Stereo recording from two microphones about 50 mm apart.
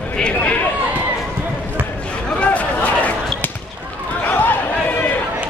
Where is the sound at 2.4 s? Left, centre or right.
Left.